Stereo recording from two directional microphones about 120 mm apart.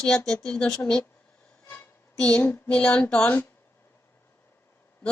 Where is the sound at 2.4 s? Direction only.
15° left (ahead or behind).